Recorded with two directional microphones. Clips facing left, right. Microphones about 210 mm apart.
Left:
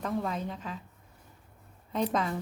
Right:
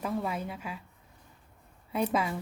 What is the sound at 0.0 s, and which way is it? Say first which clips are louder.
Speech: even; 5° right (ahead or behind).